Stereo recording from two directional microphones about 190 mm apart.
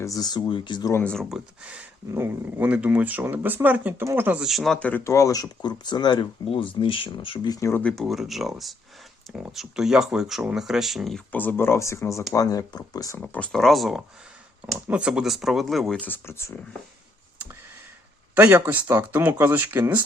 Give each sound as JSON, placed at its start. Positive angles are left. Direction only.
{"t": 0.0, "sound": "speech", "side_deg": 20}
{"t": 1.0, "sound": "speech", "side_deg": 0}
{"t": 13.2, "sound": "speech", "side_deg": 5}
{"t": 17.3, "sound": "a sound", "side_deg": -10}
{"t": 18.3, "sound": "speech", "side_deg": -10}